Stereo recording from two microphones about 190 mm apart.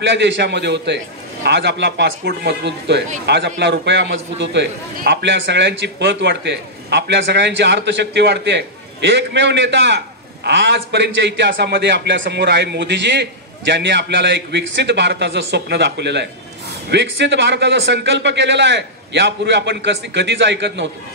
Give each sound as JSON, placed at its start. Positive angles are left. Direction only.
{"t": 0.0, "sound": "a man's voice", "side_deg": -70}